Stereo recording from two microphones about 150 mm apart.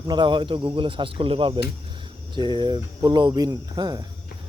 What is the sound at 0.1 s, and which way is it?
Speech, 30° right (ahead or behind).